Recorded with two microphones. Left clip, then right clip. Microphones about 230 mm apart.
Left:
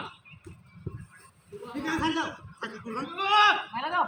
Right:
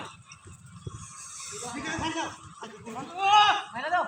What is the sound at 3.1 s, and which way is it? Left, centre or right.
Sheep, left.